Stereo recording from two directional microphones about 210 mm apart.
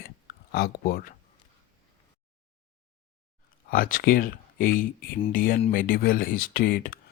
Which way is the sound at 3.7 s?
40° left (ahead or behind).